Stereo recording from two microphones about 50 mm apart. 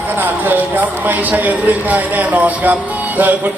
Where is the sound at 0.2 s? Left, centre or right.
Right.